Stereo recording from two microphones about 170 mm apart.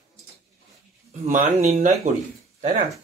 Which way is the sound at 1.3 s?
45° right (ahead or behind).